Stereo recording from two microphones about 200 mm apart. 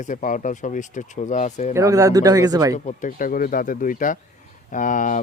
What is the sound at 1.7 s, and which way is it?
Speech, 15° right (ahead or behind).